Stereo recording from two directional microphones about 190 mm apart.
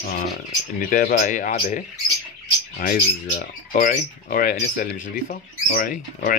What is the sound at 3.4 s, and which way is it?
Speech, 50° left (ahead or behind).